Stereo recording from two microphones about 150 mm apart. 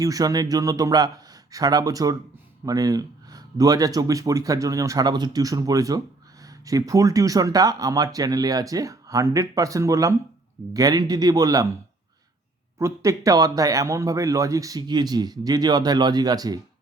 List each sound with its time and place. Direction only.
0.0 s speech: 25° right (ahead or behind)
12.8 s speech: 20° right (ahead or behind)